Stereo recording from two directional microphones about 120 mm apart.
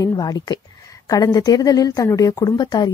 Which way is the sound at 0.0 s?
35° left (ahead or behind).